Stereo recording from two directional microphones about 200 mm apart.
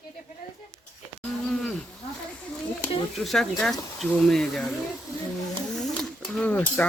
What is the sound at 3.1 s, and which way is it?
Speech, centre (ahead or behind).